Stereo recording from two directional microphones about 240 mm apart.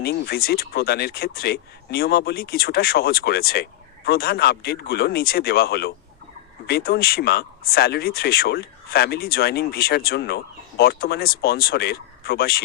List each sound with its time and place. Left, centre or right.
0.0 s speech: left